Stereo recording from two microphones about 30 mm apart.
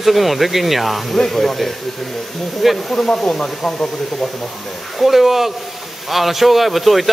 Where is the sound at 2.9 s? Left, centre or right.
Centre.